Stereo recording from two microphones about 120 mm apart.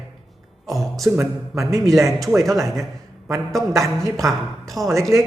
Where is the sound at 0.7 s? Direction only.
Centre (ahead or behind).